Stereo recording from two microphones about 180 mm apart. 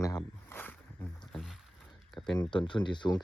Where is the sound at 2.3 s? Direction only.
25° left (ahead or behind).